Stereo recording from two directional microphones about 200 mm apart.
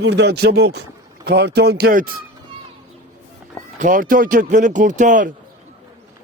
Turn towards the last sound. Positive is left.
turn(degrees=-40)  # may be behind; listen again after turning